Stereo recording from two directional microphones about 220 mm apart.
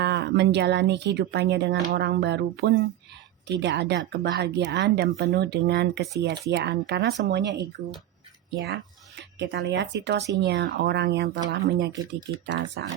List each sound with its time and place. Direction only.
0.0 s speech: 50° right (ahead or behind)